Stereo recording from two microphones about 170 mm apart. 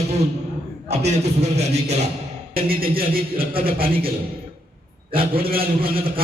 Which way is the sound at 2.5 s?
60° right (ahead or behind).